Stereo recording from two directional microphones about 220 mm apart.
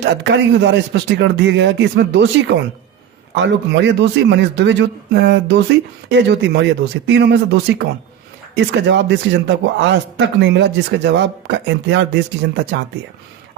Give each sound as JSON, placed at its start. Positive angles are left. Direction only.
{"t": 0.0, "sound": "a man's voice", "side_deg": -50}